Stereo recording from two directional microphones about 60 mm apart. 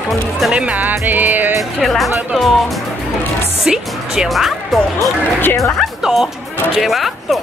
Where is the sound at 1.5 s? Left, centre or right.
Centre.